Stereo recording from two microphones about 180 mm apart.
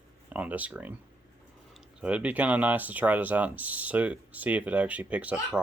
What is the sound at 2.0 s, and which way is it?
Speech, 5° right (ahead or behind).